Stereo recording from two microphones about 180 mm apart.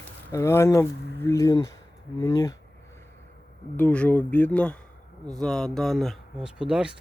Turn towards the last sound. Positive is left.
turn(degrees=-5)  # may be behind; listen again after turning